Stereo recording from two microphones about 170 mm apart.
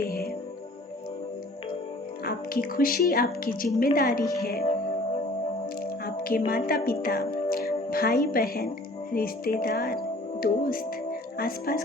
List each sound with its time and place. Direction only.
0.0 s music: 60° left (ahead or behind)
2.2 s music: 60° left (ahead or behind)
4.2 s speech: 20° left (ahead or behind)
4.6 s music: 35° left (ahead or behind)
5.8 s speech: 60° left (ahead or behind)
9.1 s music: 60° left (ahead or behind)
10.4 s speech: 60° left (ahead or behind)